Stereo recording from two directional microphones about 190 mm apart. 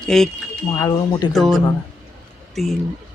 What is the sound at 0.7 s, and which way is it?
Speech, 20° left (ahead or behind).